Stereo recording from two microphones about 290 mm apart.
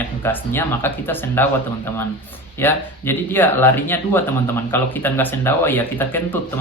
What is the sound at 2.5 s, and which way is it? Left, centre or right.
Speech, centre.